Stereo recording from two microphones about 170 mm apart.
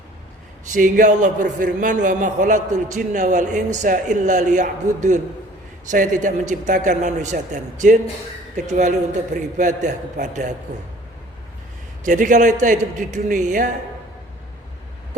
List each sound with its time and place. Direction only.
0.7 s a man's voice: 50° right (ahead or behind)
12.0 s a man's voice: 50° right (ahead or behind)